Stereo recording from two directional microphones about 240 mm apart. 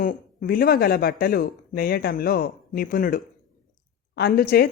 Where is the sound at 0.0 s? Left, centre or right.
Left.